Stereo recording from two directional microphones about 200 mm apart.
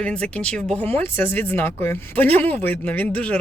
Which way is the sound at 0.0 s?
5° left (ahead or behind).